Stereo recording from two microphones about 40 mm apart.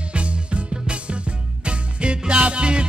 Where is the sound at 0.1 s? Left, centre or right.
Right.